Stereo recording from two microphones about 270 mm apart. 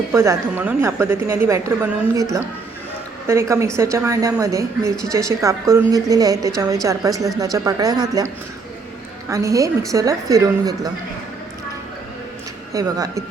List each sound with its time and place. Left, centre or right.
0.1 s a woman's voice: centre
3.2 s a woman's voice: centre
9.3 s a woman's voice: centre
12.7 s a woman's voice: centre